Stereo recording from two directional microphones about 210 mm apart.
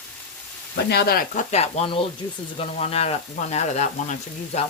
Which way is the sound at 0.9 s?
45° left (ahead or behind).